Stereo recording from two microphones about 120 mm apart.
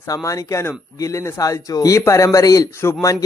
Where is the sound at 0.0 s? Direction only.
30° left (ahead or behind).